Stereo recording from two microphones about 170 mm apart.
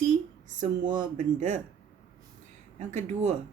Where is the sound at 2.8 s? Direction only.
45° right (ahead or behind).